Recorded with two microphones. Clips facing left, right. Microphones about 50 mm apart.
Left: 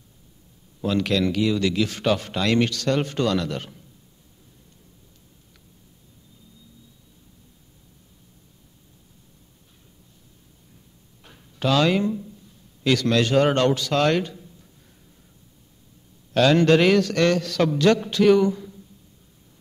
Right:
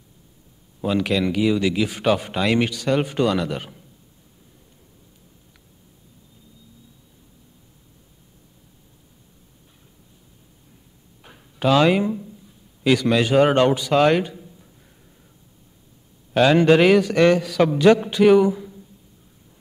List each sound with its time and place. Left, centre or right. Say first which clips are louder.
0.7 s a man's voice: right 1 dB; centre
11.2 s a sound: right 4 dB; centre
12.8 s speech: right 2 dB; centre
16.3 s a man's voice: right 2 dB; centre